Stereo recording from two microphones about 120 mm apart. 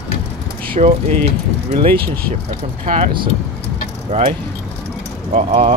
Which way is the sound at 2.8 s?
60° right (ahead or behind).